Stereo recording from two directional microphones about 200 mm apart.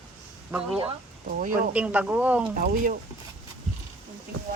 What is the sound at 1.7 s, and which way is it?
Speech, 5° right (ahead or behind).